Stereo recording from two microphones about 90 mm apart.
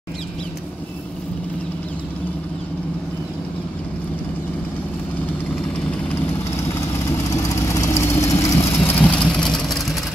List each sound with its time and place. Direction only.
7.4 s vehicle: 35° left (ahead or behind); by 9.9 s centre (ahead or behind)